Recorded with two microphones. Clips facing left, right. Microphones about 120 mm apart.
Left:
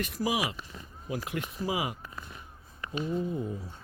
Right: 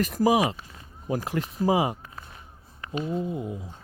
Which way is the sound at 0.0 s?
45° right (ahead or behind).